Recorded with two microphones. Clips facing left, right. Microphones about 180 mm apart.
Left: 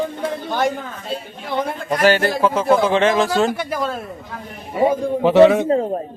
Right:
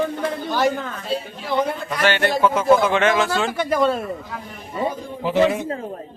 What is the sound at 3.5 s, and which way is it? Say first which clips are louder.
Speech: right 4 dB; 5° left (ahead or behind).